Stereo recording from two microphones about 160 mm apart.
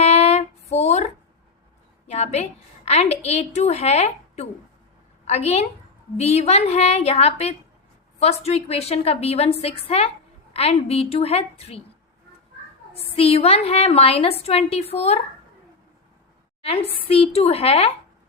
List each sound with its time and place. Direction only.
0.0 s female singing: 40° left (ahead or behind)
0.7 s a sound: 45° left (ahead or behind)
2.0 s a woman's voice: 45° left (ahead or behind)
13.1 s a woman's voice: 35° left (ahead or behind)
16.6 s a woman's voice: 35° left (ahead or behind)